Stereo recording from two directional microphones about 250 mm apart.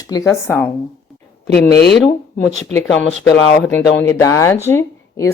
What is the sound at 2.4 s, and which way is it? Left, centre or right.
Speech, centre.